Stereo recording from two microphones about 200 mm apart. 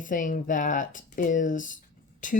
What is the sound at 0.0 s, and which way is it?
Speech, 40° left (ahead or behind).